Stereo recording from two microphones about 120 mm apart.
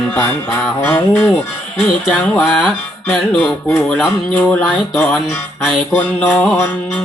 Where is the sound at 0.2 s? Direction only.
15° left (ahead or behind).